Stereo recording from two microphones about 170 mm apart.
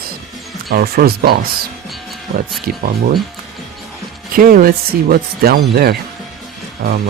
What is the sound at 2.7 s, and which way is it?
Speech, 60° right (ahead or behind).